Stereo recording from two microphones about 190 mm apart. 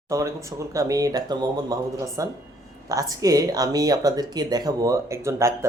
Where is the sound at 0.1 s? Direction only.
15° right (ahead or behind).